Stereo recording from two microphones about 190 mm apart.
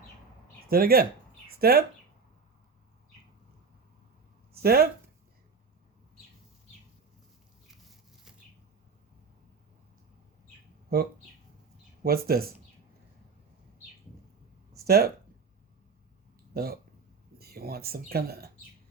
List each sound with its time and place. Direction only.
0.7 s speech: 55° right (ahead or behind)
4.5 s speech: 55° right (ahead or behind)
10.9 s speech: 55° right (ahead or behind)
14.8 s speech: 55° right (ahead or behind)
17.3 s speech: 55° right (ahead or behind)